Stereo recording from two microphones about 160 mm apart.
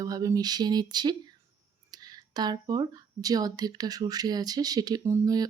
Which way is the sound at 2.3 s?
25° right (ahead or behind).